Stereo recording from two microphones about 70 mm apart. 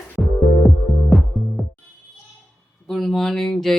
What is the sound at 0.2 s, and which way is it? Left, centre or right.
Music, centre.